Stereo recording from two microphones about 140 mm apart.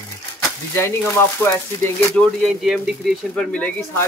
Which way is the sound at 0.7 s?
20° left (ahead or behind).